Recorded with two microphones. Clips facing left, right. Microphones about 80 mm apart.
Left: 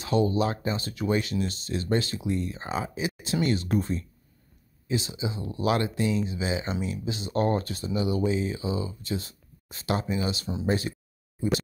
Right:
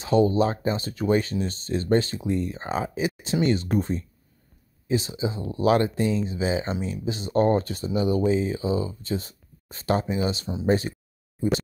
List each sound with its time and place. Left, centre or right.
0.0 s speech: right
4.8 s speech: right